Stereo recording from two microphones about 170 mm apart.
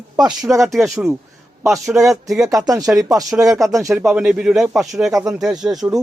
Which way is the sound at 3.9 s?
5° right (ahead or behind).